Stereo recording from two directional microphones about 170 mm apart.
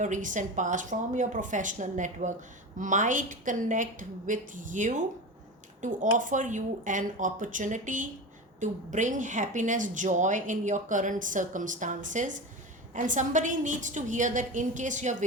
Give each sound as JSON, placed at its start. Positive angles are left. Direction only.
{"t": 0.0, "sound": "speech", "side_deg": -50}